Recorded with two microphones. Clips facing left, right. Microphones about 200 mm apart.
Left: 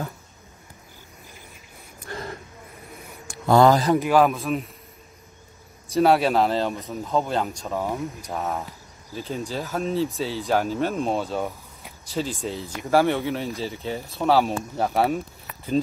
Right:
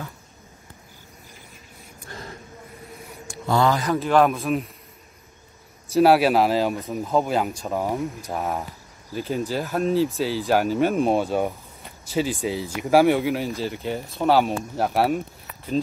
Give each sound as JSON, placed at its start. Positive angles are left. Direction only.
{"t": 2.1, "sound": "a sound", "side_deg": 65}
{"t": 3.4, "sound": "a man's voice", "side_deg": 45}
{"t": 4.1, "sound": "speech", "side_deg": 0}
{"t": 5.9, "sound": "speech", "side_deg": -5}
{"t": 11.8, "sound": "speech", "side_deg": -5}